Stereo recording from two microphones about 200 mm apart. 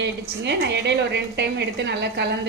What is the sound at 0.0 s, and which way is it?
A woman's voice, 55° right (ahead or behind).